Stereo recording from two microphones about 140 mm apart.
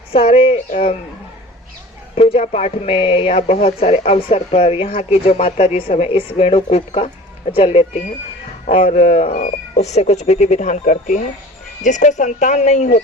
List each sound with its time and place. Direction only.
0.1 s speech: 40° left (ahead or behind)
0.7 s speech: 55° left (ahead or behind)
2.1 s speech: 50° left (ahead or behind)